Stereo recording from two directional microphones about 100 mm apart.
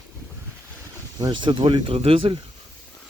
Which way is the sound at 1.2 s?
50° right (ahead or behind).